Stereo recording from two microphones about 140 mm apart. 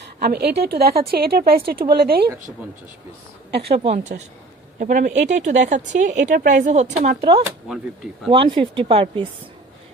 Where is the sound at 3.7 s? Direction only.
45° right (ahead or behind).